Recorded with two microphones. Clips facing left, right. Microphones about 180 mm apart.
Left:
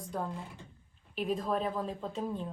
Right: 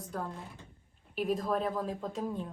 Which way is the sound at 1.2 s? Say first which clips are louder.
Right 1 dB; 10° right (ahead or behind).